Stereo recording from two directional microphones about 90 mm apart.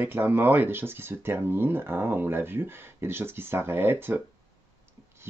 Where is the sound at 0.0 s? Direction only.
25° right (ahead or behind).